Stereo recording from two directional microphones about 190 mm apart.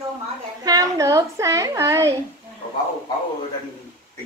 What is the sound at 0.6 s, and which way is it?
A child's voice, 20° right (ahead or behind).